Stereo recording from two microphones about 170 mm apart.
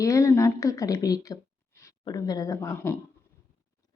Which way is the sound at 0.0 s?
20° left (ahead or behind).